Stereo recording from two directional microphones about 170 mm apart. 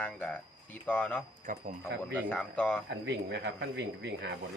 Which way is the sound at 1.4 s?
50° right (ahead or behind).